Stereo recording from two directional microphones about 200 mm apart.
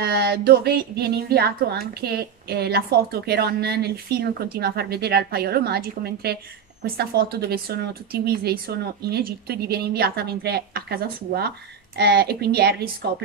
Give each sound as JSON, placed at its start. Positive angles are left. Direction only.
{"t": 0.0, "sound": "speech", "side_deg": -50}